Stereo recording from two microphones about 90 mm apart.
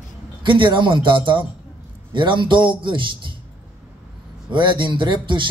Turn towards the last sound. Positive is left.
turn(degrees=-65)  # may be behind; listen again after turning